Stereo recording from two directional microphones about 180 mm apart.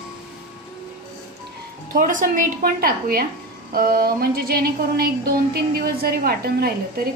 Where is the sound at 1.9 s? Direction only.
50° right (ahead or behind).